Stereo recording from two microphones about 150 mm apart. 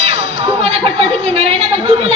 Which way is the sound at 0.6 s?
40° right (ahead or behind).